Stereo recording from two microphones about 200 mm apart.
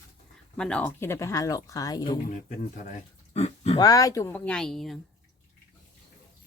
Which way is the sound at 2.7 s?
35° left (ahead or behind).